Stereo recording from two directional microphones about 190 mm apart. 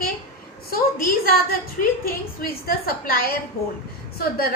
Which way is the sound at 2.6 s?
50° left (ahead or behind).